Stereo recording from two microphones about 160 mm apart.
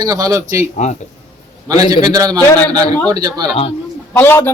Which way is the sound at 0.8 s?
50° left (ahead or behind).